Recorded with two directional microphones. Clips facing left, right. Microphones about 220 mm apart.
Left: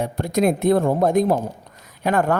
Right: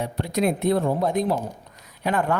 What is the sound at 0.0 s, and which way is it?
Speech, 45° left (ahead or behind).